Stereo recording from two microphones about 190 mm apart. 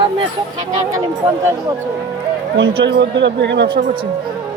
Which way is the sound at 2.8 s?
70° right (ahead or behind).